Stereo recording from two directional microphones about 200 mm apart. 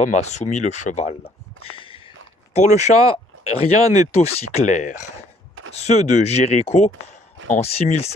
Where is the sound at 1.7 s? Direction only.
25° left (ahead or behind).